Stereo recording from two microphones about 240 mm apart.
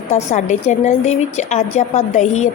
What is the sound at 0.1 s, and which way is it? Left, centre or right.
A woman's voice, left.